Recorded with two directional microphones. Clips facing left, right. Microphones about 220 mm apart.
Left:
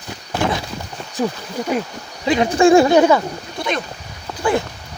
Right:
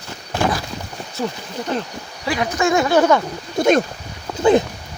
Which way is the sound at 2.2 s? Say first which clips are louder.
Left 6 dB; 25° left (ahead or behind).